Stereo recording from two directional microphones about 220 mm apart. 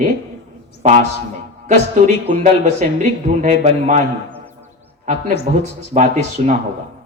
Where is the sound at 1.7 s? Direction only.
30° right (ahead or behind).